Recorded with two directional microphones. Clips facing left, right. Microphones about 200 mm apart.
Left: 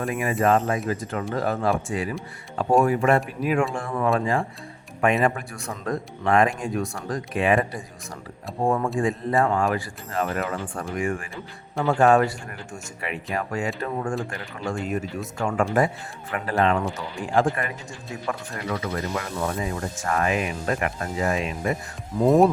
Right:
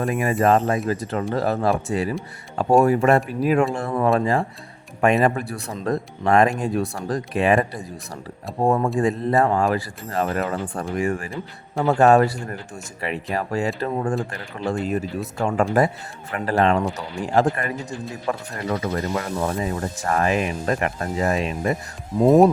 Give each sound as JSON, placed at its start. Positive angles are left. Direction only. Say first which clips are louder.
{"t": 0.1, "sound": "speech", "louder": "right 2 dB", "side_deg": -40}